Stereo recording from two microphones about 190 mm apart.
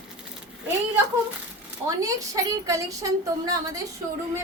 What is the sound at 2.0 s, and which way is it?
A woman's voice, 15° right (ahead or behind).